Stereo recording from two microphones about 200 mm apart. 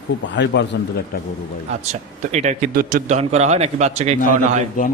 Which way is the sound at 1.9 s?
35° right (ahead or behind).